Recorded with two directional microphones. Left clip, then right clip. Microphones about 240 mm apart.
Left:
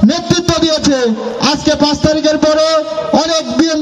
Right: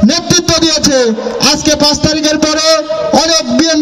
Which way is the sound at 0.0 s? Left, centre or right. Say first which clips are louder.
Right 2 dB; right.